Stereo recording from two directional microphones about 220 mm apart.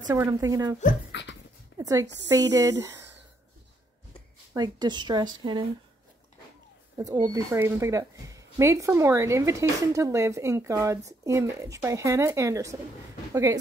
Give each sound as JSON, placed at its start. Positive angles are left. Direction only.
{"t": 0.1, "sound": "speech", "side_deg": -15}
{"t": 1.1, "sound": "speech", "side_deg": 55}
{"t": 1.8, "sound": "speech", "side_deg": -15}
{"t": 4.6, "sound": "speech", "side_deg": -20}
{"t": 7.0, "sound": "speech", "side_deg": -15}